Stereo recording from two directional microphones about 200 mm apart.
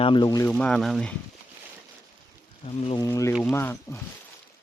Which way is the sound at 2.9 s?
15° left (ahead or behind).